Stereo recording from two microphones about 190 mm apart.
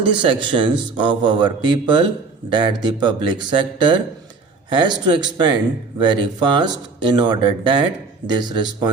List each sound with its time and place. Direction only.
0.0 s speech: 25° right (ahead or behind)